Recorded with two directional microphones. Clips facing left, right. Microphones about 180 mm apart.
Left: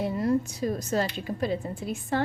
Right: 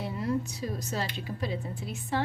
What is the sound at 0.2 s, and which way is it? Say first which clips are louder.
Speech: left 3 dB; 45° left (ahead or behind).